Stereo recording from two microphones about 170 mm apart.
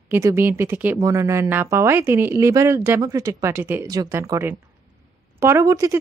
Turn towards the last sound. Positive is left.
turn(degrees=-20)  # may be behind; listen again after turning